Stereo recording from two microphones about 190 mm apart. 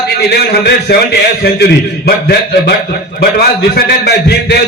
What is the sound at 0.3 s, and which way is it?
A man's voice, 60° left (ahead or behind).